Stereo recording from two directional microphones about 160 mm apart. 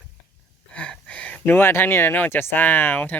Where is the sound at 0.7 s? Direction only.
5° left (ahead or behind).